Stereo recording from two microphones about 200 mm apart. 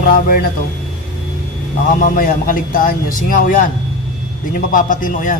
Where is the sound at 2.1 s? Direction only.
45° left (ahead or behind).